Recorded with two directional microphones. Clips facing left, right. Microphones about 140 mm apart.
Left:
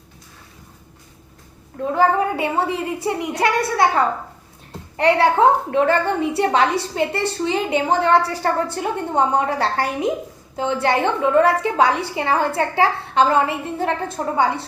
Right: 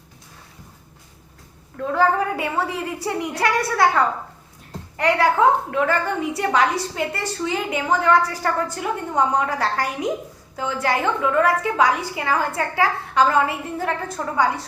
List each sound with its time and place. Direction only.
1.7 s a woman's voice: 20° left (ahead or behind)